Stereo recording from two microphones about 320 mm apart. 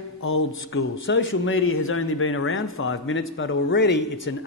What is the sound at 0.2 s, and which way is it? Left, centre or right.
A man's voice, left.